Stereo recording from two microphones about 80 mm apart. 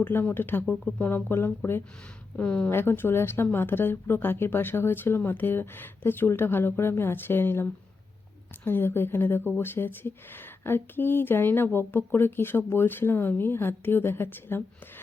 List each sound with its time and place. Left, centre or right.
0.0 s speech: left
1.3 s speech: left
2.3 s speech: centre
2.6 s speech: left